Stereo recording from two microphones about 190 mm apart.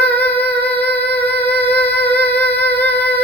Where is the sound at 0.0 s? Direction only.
10° left (ahead or behind).